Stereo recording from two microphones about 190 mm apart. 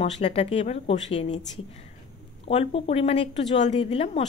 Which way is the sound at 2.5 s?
30° left (ahead or behind).